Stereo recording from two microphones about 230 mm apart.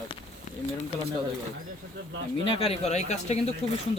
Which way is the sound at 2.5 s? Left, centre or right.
Left.